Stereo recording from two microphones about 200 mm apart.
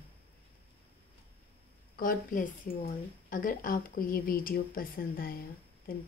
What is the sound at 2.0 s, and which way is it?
A woman's voice, 45° left (ahead or behind).